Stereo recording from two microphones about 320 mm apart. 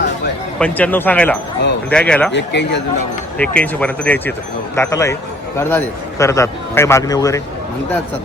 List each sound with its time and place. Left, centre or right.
0.6 s speech: centre
2.3 s speech: left
3.3 s a man's voice: centre